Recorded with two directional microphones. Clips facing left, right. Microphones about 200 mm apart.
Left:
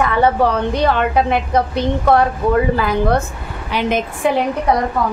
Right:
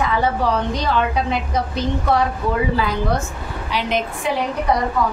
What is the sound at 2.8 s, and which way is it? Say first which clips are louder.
A woman's voice: left 4 dB; 55° left (ahead or behind).